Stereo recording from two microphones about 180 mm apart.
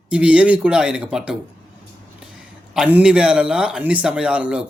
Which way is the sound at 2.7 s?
5° right (ahead or behind).